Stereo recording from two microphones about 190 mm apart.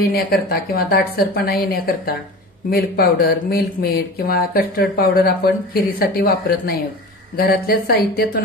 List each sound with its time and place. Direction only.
0.1 s speech: 55° left (ahead or behind)